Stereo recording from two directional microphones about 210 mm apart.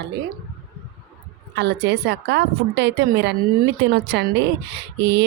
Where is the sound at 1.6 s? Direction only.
55° right (ahead or behind).